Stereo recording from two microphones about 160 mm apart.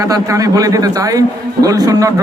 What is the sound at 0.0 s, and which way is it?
A man's voice, 20° right (ahead or behind).